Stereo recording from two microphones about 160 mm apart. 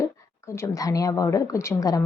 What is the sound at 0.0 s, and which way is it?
A woman's voice, 15° left (ahead or behind).